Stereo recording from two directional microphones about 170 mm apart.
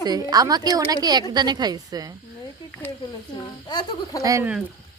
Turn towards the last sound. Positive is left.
turn(degrees=-20)  # may be behind; listen again after turning